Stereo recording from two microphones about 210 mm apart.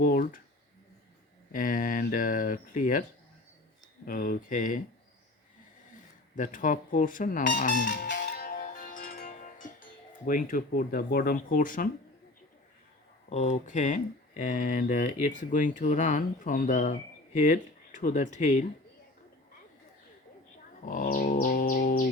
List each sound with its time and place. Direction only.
0.0 s speech: 40° left (ahead or behind)
1.5 s speech: 40° left (ahead or behind)
4.0 s speech: 45° left (ahead or behind)
6.3 s music: 40° left (ahead or behind)
10.2 s speech: 40° left (ahead or behind)
13.3 s speech: 30° left (ahead or behind)
20.8 s bird: 40° left (ahead or behind)